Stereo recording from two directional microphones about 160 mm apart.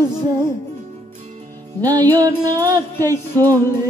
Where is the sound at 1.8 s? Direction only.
25° right (ahead or behind).